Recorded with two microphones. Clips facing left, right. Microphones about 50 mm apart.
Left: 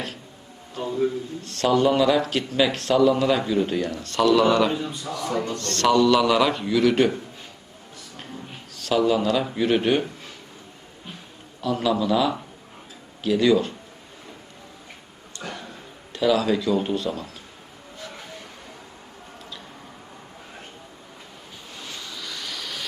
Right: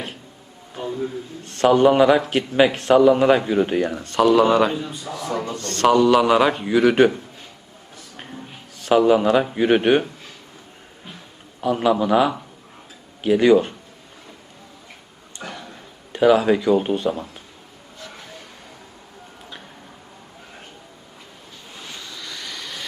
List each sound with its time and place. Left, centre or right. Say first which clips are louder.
1.5 s a man's voice: right 5 dB; right
3.9 s a man's voice: right 3 dB; centre
8.7 s a man's voice: right 5 dB; right
11.6 s a man's voice: right 4 dB; right
15.4 s a sound: right 1 dB; right
16.1 s a man's voice: right 5 dB; right
22.0 s vehicle: even; centre